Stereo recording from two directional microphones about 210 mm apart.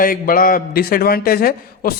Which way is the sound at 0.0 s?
40° left (ahead or behind).